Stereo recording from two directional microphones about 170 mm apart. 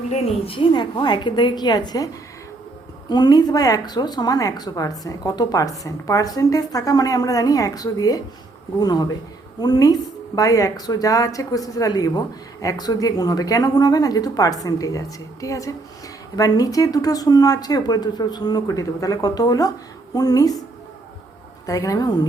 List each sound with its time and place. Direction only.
0.1 s a woman's voice: 35° left (ahead or behind)
3.1 s a woman's voice: 25° left (ahead or behind)
21.7 s a woman's voice: 20° left (ahead or behind)